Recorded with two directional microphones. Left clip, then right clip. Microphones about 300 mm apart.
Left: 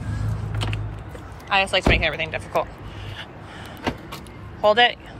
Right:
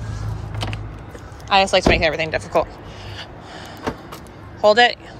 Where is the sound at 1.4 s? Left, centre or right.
Centre.